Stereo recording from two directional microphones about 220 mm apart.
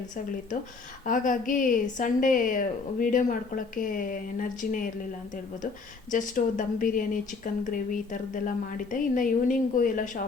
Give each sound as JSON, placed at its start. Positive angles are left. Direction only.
{"t": 1.0, "sound": "speech", "side_deg": 35}
{"t": 6.1, "sound": "speech", "side_deg": 35}